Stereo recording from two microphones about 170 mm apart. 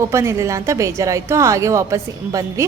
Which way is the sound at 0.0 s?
15° right (ahead or behind).